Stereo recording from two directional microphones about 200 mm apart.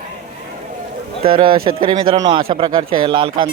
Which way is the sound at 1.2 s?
25° right (ahead or behind).